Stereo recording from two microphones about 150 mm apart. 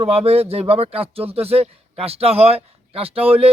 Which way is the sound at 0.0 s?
45° right (ahead or behind).